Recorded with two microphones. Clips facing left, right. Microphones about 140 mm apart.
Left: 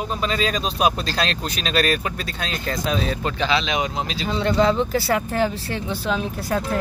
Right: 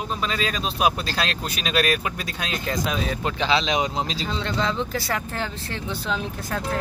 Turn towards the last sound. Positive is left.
turn(degrees=10)  # may be behind; listen again after turning